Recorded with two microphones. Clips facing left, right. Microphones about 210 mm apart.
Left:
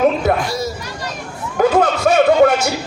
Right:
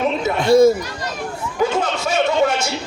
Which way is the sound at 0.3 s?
60° left (ahead or behind).